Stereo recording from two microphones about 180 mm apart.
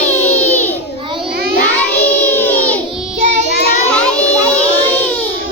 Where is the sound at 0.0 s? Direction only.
10° left (ahead or behind).